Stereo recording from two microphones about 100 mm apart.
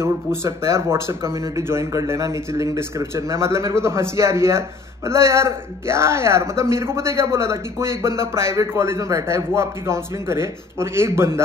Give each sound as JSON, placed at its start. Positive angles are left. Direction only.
{"t": 0.0, "sound": "speech", "side_deg": -25}